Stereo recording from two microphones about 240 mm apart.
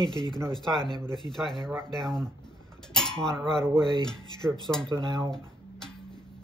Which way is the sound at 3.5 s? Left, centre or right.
Centre.